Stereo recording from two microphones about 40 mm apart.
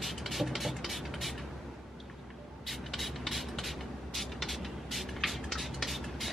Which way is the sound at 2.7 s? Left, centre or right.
Centre.